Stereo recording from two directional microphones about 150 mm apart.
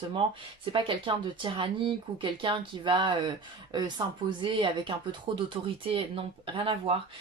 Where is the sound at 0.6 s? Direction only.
35° right (ahead or behind).